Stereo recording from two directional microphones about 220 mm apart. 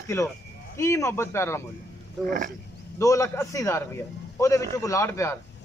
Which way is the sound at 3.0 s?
15° left (ahead or behind).